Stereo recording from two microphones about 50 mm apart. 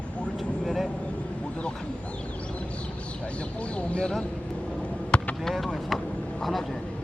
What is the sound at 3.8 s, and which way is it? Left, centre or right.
Speech, left.